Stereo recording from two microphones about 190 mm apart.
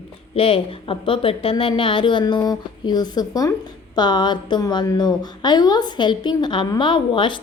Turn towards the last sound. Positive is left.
turn(degrees=25)  # may be behind; listen again after turning